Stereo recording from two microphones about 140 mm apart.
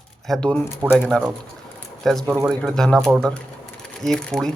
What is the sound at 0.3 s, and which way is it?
Speech, 5° left (ahead or behind).